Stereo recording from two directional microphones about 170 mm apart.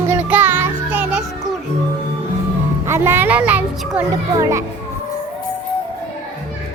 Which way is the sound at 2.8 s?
15° right (ahead or behind).